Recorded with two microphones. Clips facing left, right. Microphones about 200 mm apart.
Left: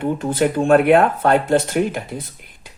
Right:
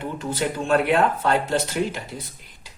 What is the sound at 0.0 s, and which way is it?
Speech, 55° left (ahead or behind).